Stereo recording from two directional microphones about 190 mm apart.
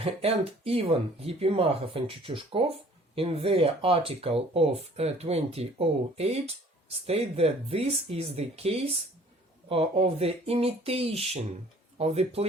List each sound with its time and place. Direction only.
0.0 s speech: 30° right (ahead or behind)